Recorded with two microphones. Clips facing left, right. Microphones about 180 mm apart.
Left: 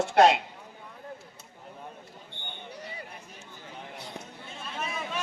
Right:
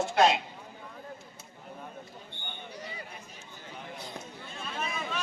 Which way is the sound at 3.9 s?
70° left (ahead or behind).